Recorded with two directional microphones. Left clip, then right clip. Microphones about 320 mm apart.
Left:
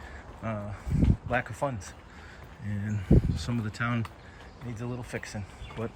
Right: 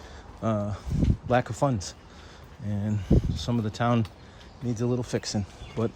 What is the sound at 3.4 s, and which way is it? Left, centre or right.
Speech, centre.